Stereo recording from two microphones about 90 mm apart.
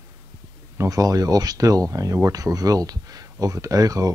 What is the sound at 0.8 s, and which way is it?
Speech, 40° right (ahead or behind).